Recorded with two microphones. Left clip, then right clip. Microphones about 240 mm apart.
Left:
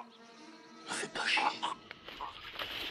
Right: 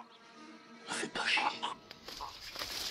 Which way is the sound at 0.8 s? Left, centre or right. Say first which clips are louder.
Even; centre.